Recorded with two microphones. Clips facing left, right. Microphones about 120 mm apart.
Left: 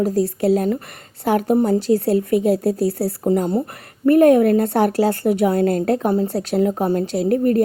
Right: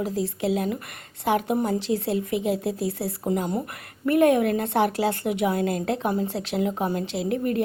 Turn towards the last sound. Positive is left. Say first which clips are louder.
# left 8 dB
turn(degrees=40)  # may be behind; listen again after turning